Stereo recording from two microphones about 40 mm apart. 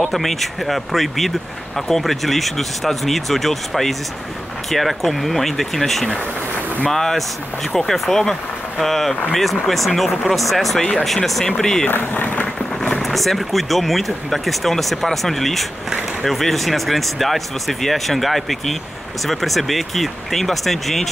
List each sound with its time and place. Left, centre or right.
0.0 s speech: centre
11.4 s speech: centre
11.9 s speech: left
13.0 s speech: centre